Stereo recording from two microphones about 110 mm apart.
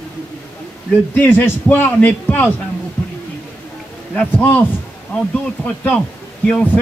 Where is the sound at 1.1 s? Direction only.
15° left (ahead or behind).